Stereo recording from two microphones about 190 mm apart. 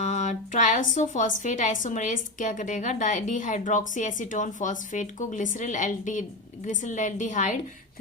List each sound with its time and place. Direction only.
0.0 s a woman's voice: 40° left (ahead or behind)